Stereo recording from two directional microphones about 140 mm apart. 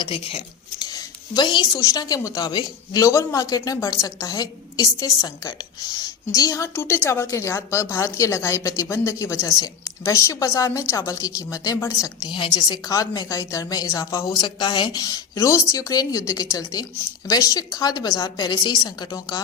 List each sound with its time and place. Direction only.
0.0 s speech: 40° left (ahead or behind)